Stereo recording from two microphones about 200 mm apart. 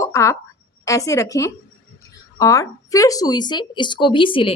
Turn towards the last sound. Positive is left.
turn(degrees=25)  # may be behind; listen again after turning